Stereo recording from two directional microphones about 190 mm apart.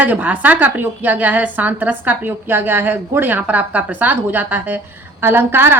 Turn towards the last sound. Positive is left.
turn(degrees=-10)  # may be behind; listen again after turning